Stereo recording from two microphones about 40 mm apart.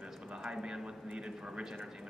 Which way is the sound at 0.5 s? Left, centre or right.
Centre.